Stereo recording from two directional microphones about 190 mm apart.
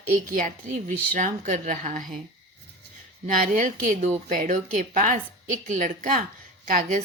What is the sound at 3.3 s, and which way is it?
A woman's voice, 45° right (ahead or behind).